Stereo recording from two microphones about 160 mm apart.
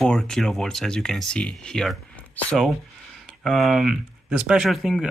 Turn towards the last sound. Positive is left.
turn(degrees=0)  # may be behind; listen again after turning